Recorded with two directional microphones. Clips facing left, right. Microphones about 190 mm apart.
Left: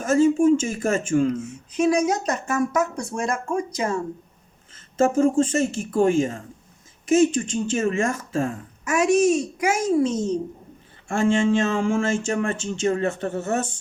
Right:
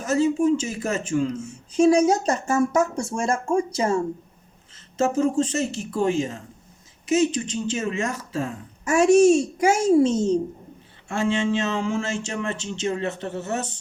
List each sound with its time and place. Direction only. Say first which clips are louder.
0.0 s speech: left 3 dB; 50° left (ahead or behind)
1.7 s speech: right 3 dB; 30° right (ahead or behind)
4.9 s speech: left 3 dB; 50° left (ahead or behind)
8.8 s speech: right 3 dB; 30° right (ahead or behind)
11.1 s speech: left 3 dB; 50° left (ahead or behind)